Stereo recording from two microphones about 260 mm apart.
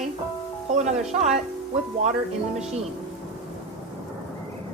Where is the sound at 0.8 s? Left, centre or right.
Right.